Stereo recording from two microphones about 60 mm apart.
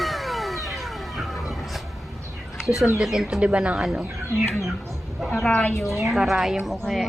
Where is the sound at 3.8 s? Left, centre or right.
Centre.